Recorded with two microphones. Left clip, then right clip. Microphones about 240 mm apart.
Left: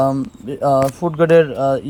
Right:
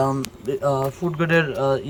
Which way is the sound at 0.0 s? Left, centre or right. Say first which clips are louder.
Left 5 dB; centre.